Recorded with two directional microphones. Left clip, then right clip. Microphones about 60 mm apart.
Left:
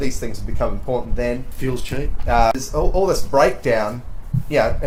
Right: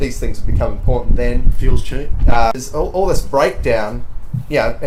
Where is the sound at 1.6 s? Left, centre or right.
Left.